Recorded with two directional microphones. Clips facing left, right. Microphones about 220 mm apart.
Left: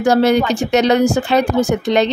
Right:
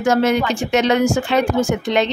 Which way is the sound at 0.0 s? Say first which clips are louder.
Left 3 dB; 35° left (ahead or behind).